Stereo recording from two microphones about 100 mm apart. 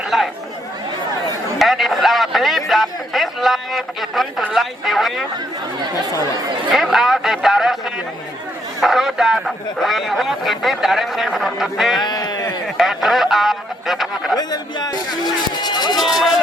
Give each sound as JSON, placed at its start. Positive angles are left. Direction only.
{"t": 0.1, "sound": "chatter", "side_deg": -5}
{"t": 1.5, "sound": "a sound", "side_deg": 0}
{"t": 6.7, "sound": "speech", "side_deg": -5}
{"t": 8.8, "sound": "speech", "side_deg": -5}
{"t": 12.0, "sound": "sheep", "side_deg": 40}
{"t": 12.7, "sound": "a sound", "side_deg": 0}
{"t": 14.3, "sound": "speech", "side_deg": 45}
{"t": 16.0, "sound": "speech", "side_deg": 0}